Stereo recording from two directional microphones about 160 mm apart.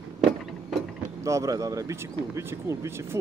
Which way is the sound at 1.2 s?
20° right (ahead or behind).